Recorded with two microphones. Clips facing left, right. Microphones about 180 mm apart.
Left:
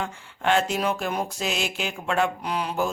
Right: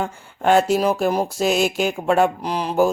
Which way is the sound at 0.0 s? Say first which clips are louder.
Right 6 dB; 40° right (ahead or behind).